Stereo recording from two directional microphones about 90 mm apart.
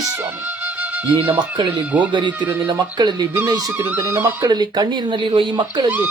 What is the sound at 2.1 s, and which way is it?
Speech, 60° right (ahead or behind).